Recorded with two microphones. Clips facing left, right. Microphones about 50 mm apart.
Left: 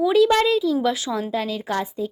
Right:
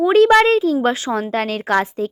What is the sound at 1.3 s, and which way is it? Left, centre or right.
Speech, right.